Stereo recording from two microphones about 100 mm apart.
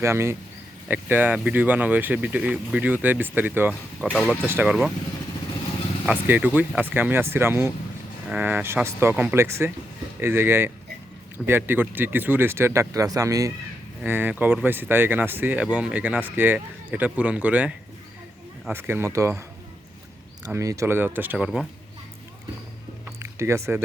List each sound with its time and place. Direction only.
0.0 s speech: 25° right (ahead or behind)
6.1 s speech: 15° right (ahead or behind); by 13.5 s 35° right (ahead or behind)
14.0 s speech: 20° right (ahead or behind)
20.5 s speech: 30° right (ahead or behind)
21.3 s speech: 5° right (ahead or behind)
23.2 s speech: 30° right (ahead or behind)